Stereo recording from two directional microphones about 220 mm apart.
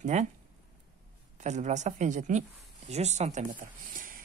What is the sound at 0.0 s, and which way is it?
Speech, 30° right (ahead or behind).